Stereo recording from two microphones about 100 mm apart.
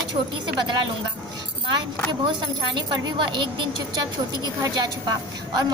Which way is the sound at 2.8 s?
45° right (ahead or behind).